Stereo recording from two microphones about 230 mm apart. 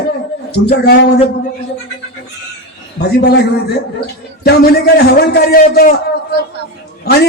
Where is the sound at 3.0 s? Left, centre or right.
Left.